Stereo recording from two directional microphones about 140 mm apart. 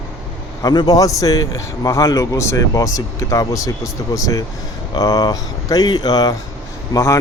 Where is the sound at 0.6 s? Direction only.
30° left (ahead or behind).